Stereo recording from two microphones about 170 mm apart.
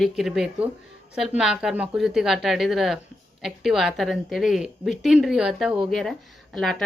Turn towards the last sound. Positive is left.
turn(degrees=0)  # may be behind; listen again after turning